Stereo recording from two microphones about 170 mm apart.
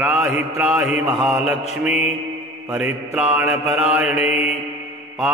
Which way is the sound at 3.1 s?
5° right (ahead or behind).